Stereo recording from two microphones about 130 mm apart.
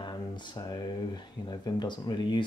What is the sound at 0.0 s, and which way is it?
Speech, 35° left (ahead or behind).